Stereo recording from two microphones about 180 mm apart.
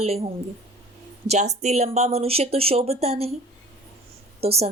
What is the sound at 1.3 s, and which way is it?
Speech, 40° right (ahead or behind).